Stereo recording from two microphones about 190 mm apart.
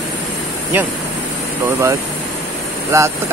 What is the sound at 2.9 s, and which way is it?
Speech, 15° right (ahead or behind).